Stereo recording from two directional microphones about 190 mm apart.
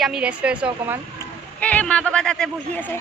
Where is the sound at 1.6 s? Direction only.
10° left (ahead or behind).